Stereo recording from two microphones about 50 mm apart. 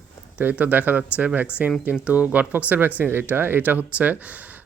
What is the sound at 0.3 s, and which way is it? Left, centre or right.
Speech, right.